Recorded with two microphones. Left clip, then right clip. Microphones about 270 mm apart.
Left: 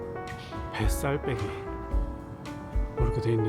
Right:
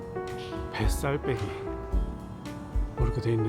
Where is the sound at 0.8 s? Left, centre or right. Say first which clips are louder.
Left 1 dB; centre.